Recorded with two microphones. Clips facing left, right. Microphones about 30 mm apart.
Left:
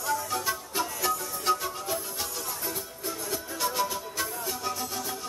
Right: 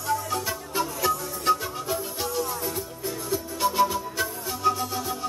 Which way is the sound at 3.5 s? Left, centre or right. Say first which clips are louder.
Right 7 dB; centre.